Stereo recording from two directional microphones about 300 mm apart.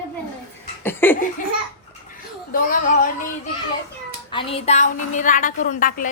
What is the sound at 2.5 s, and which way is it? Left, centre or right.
Speech, left.